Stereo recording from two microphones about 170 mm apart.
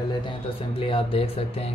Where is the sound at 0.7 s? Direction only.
30° left (ahead or behind).